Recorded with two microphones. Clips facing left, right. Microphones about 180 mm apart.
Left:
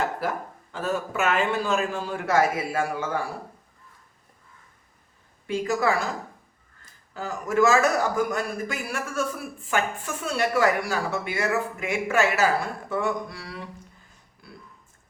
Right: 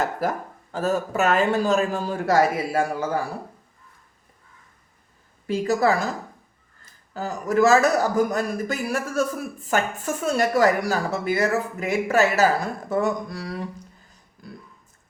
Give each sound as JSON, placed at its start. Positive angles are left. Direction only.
{"t": 0.2, "sound": "speech", "side_deg": -40}
{"t": 5.5, "sound": "speech", "side_deg": -40}
{"t": 7.1, "sound": "speech", "side_deg": -40}
{"t": 14.4, "sound": "a sound", "side_deg": -40}